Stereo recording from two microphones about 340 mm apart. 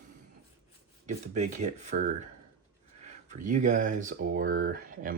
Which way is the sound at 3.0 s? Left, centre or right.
Right.